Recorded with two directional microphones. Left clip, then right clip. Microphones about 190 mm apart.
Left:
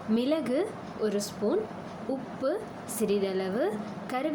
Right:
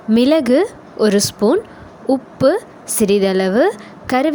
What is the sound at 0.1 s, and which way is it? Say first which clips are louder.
A woman's voice: right 15 dB; 55° right (ahead or behind).